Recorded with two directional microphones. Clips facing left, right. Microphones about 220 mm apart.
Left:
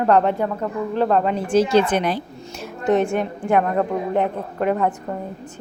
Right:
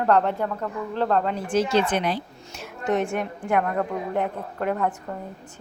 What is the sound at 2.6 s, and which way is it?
A woman's voice, 30° left (ahead or behind).